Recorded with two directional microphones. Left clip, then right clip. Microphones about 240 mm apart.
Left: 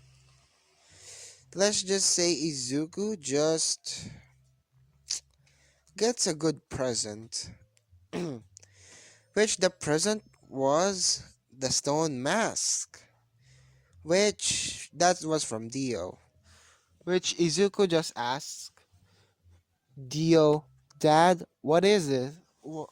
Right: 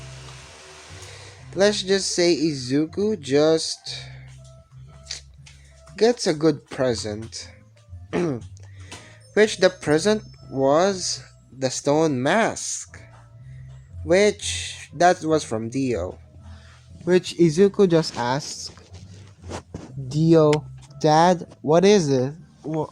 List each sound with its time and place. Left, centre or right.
1.5 s speech: left
6.0 s speech: left
8.1 s speech: left
10.9 s speech: left
11.8 s speech: left
14.0 s speech: left
20.1 s speech: left